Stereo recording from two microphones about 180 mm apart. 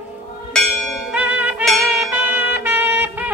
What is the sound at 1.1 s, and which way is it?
Music, 5° right (ahead or behind).